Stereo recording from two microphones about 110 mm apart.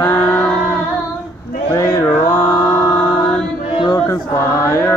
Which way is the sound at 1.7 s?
25° left (ahead or behind).